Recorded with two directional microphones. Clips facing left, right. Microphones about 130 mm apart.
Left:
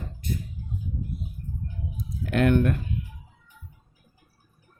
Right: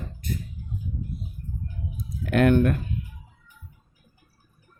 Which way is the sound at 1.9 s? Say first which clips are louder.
Right 3 dB; 50° right (ahead or behind).